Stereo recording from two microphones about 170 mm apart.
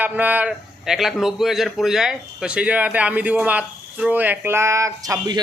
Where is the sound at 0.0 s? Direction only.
10° right (ahead or behind).